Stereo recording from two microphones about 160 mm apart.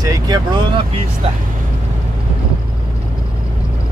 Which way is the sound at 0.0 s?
20° right (ahead or behind).